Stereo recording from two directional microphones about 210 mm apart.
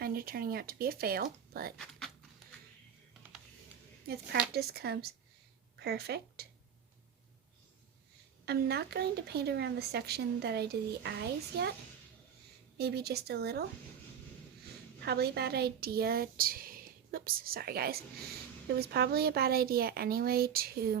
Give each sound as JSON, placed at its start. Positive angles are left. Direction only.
{"t": 0.0, "sound": "speech", "side_deg": -45}
{"t": 1.8, "sound": "speech", "side_deg": 0}
{"t": 4.0, "sound": "speech", "side_deg": -50}
{"t": 8.4, "sound": "speech", "side_deg": -50}
{"t": 12.7, "sound": "speech", "side_deg": -50}
{"t": 15.0, "sound": "speech", "side_deg": -50}